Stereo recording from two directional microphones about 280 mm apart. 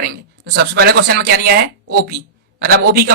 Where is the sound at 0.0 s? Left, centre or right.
Right.